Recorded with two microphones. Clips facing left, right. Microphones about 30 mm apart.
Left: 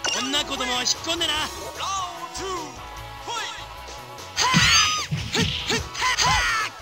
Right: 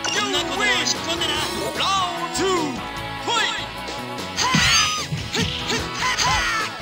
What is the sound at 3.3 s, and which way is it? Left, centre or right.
Speech, right.